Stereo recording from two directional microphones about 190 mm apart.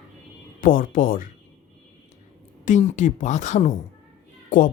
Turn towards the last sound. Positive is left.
turn(degrees=45)  # may be behind; listen again after turning